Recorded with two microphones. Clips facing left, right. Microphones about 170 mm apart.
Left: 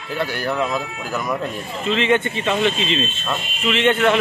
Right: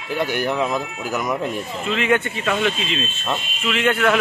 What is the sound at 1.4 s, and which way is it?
A man's voice, 5° right (ahead or behind).